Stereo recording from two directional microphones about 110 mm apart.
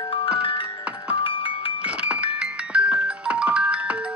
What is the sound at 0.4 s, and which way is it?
Music, 50° left (ahead or behind).